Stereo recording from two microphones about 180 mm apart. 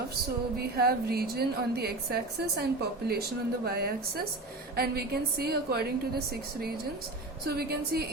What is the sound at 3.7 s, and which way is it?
A woman's voice, 60° right (ahead or behind).